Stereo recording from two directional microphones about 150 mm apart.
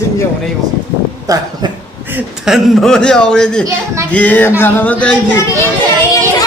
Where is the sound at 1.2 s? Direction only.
25° right (ahead or behind).